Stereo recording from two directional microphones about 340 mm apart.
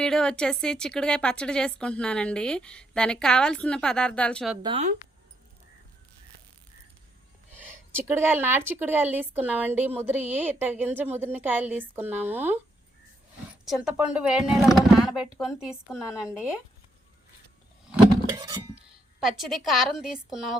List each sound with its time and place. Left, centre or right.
0.0 s a woman's voice: centre
4.6 s speech: centre
7.6 s a woman's voice: centre
13.7 s a woman's voice: centre
17.9 s a sound: centre
19.4 s a woman's voice: centre